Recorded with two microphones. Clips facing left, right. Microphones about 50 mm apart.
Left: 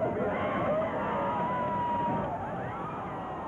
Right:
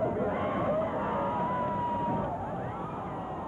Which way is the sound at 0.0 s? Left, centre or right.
Left.